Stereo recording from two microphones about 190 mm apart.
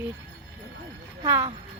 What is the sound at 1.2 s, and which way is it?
Speech, 15° right (ahead or behind).